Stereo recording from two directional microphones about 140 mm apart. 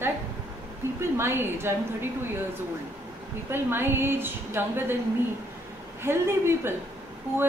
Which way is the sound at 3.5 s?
15° right (ahead or behind).